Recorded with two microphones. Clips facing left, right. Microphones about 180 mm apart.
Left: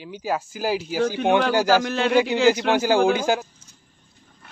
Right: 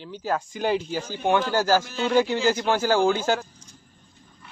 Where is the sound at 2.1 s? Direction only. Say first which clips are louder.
Left 2 dB; 15° left (ahead or behind).